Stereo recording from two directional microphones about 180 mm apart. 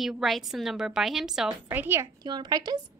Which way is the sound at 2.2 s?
25° right (ahead or behind).